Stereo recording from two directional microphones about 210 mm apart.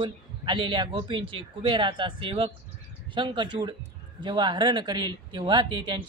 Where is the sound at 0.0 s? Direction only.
25° right (ahead or behind).